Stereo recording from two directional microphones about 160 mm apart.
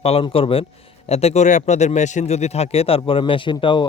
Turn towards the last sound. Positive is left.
turn(degrees=30)  # may be behind; listen again after turning